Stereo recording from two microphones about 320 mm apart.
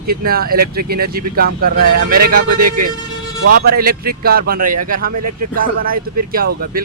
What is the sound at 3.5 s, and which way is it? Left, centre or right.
Speech, right.